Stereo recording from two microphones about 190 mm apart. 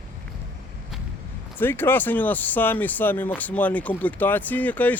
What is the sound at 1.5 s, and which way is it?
Speech, 10° left (ahead or behind).